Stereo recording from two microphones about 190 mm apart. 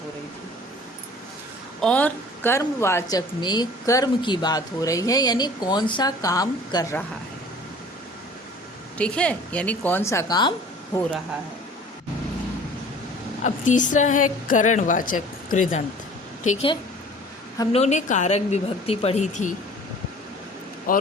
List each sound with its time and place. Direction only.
1.8 s a woman's voice: 5° left (ahead or behind)
9.0 s speech: 5° left (ahead or behind)
13.4 s a woman's voice: 40° left (ahead or behind)
17.7 s a woman's voice: 35° left (ahead or behind)
20.9 s speech: 50° left (ahead or behind)